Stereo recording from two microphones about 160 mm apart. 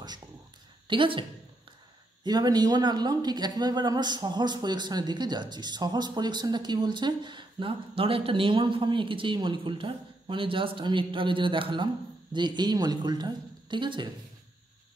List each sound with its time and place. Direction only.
0.8 s a woman's voice: 30° right (ahead or behind)
2.2 s speech: 25° right (ahead or behind)